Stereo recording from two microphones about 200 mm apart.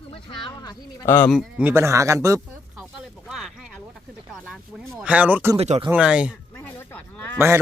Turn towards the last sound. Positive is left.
turn(degrees=-10)  # may be behind; listen again after turning